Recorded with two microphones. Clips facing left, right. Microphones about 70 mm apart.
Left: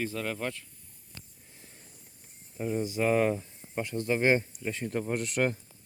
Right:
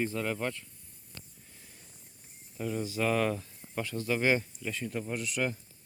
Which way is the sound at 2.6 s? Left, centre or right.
Left.